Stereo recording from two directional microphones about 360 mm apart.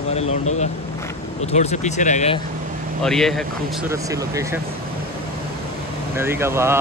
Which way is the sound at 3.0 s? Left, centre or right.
Centre.